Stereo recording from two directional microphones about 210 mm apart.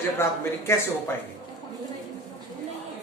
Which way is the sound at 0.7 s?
10° left (ahead or behind).